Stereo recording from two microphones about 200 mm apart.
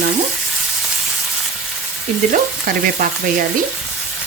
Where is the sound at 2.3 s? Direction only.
45° right (ahead or behind).